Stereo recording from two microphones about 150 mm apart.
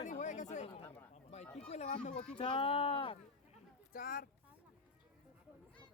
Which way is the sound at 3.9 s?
75° left (ahead or behind).